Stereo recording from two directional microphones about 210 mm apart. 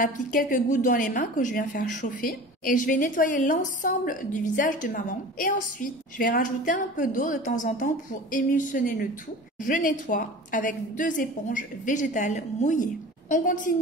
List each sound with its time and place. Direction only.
0.0 s a woman's voice: 40° left (ahead or behind)